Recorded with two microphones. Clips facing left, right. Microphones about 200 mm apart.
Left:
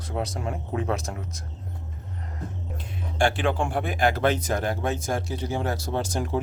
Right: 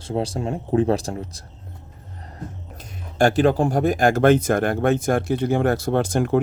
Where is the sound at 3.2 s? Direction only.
40° right (ahead or behind); by 6.3 s 55° right (ahead or behind).